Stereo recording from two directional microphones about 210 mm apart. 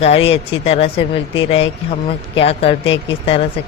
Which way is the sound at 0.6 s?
30° left (ahead or behind).